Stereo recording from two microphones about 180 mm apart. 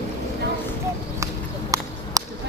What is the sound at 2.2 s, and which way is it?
Whip, 20° right (ahead or behind).